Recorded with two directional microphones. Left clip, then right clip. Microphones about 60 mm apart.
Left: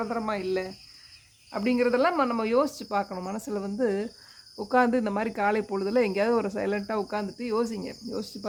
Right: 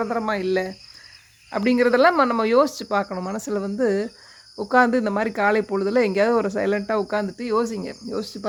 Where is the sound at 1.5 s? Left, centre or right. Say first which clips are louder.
Right 6 dB; right.